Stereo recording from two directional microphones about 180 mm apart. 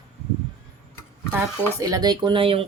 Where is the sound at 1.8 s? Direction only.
20° right (ahead or behind).